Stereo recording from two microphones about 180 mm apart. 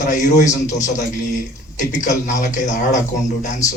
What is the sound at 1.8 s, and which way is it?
A man's voice, 45° left (ahead or behind).